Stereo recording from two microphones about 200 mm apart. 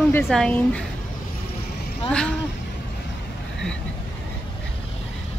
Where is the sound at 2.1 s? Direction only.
5° left (ahead or behind).